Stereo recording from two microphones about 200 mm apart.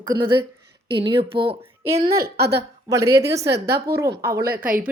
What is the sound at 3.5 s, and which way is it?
Speech, 55° right (ahead or behind).